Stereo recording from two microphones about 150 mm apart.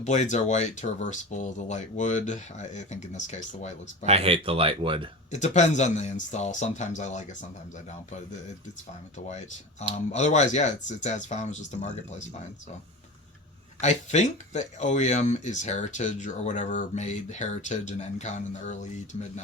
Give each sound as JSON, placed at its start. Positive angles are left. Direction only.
{"t": 0.0, "sound": "speech", "side_deg": 55}
{"t": 4.0, "sound": "speech", "side_deg": -45}
{"t": 5.3, "sound": "speech", "side_deg": 50}
{"t": 9.9, "sound": "speech", "side_deg": 50}
{"t": 13.8, "sound": "speech", "side_deg": 50}